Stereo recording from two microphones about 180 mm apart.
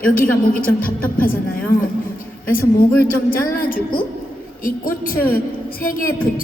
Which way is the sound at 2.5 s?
55° left (ahead or behind).